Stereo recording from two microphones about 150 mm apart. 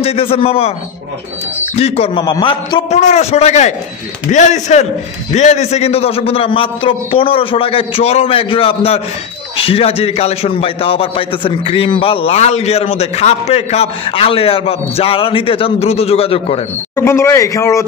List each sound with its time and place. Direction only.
0.0 s a man's voice: 40° left (ahead or behind)
1.8 s a man's voice: 40° left (ahead or behind)
2.2 s a man's voice: 30° left (ahead or behind)
2.9 s a man's voice: 50° left (ahead or behind)
16.9 s speech: 15° left (ahead or behind)